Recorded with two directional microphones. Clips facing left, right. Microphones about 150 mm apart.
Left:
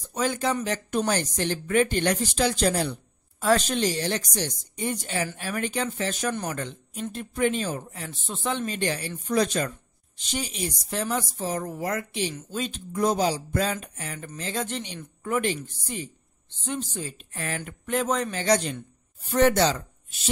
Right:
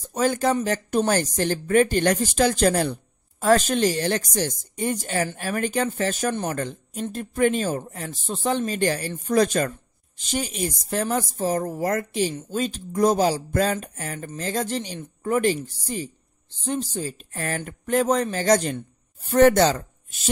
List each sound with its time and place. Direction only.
0.1 s a man's voice: 45° right (ahead or behind)